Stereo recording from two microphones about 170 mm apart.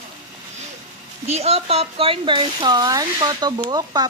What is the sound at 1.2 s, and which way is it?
Speech, 40° right (ahead or behind).